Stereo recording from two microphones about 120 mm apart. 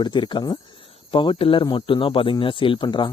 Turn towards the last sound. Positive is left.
turn(degrees=40)  # may be behind; listen again after turning